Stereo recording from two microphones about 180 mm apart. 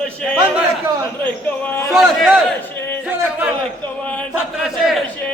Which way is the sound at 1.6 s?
10° left (ahead or behind).